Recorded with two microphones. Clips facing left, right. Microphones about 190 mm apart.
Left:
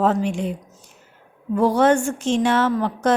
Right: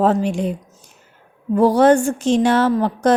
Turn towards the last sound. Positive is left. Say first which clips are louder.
# right 4 dB
turn(degrees=-35)  # may be behind; listen again after turning